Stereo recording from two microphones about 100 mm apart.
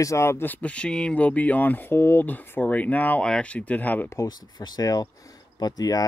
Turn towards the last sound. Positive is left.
turn(degrees=40)  # may be behind; listen again after turning